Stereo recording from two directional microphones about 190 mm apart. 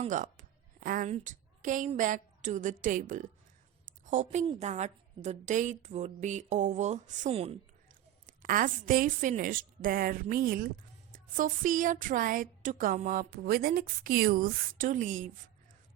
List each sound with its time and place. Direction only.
0.0 s a woman's voice: 40° right (ahead or behind)
8.3 s a woman's voice: 45° right (ahead or behind)